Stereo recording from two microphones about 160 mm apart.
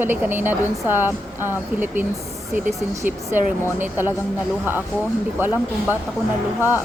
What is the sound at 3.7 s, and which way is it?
Speech, 15° right (ahead or behind).